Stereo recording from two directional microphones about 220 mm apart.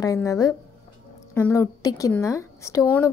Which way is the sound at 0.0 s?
15° left (ahead or behind).